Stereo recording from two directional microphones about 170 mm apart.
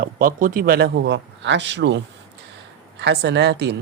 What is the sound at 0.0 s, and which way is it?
Speech, 55° right (ahead or behind).